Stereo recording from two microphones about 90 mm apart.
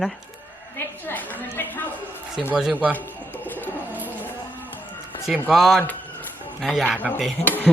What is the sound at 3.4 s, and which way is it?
Bird, 20° left (ahead or behind).